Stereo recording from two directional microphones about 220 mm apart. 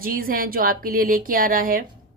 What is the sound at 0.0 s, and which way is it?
Speech, 40° right (ahead or behind).